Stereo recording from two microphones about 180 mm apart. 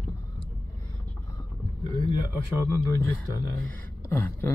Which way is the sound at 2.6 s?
15° left (ahead or behind).